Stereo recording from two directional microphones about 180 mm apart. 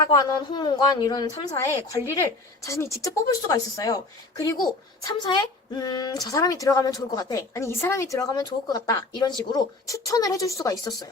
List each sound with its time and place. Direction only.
0.1 s speech: 20° left (ahead or behind)